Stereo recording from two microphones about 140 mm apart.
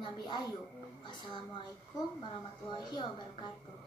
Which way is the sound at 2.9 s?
30° left (ahead or behind).